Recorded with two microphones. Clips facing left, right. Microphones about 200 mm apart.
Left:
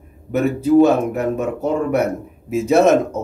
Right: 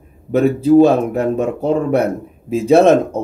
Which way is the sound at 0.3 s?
30° right (ahead or behind).